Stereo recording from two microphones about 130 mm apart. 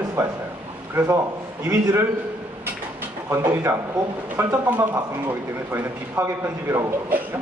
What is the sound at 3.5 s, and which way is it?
Speech, 20° right (ahead or behind).